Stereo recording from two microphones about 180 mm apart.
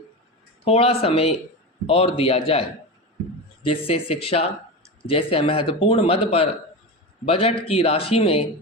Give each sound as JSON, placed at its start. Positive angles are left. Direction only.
{"t": 0.6, "sound": "speech", "side_deg": 35}